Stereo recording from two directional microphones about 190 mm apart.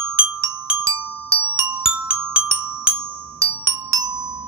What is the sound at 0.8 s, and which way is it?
Glockenspiel, 15° right (ahead or behind).